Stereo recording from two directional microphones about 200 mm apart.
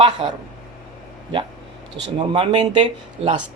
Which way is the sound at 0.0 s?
25° right (ahead or behind).